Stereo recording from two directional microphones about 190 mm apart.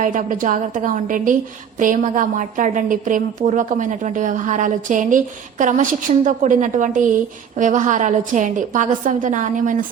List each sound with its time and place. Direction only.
0.0 s a woman's voice: 45° right (ahead or behind)